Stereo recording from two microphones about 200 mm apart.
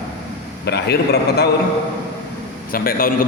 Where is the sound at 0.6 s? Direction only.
55° left (ahead or behind).